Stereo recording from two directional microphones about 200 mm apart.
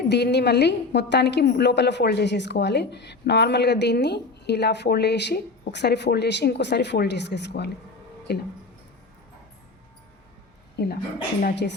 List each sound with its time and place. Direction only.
0.1 s a woman's voice: 55° left (ahead or behind)
10.8 s a woman's voice: 55° left (ahead or behind)